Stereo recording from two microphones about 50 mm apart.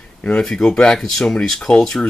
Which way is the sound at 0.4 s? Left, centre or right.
Centre.